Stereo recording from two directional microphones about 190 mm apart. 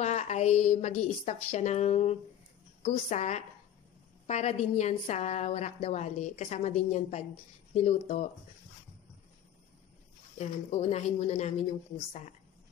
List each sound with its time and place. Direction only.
0.0 s a woman's voice: 35° left (ahead or behind)
10.3 s a woman's voice: 35° left (ahead or behind)